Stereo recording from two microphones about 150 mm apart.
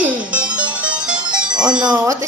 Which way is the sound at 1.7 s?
5° right (ahead or behind).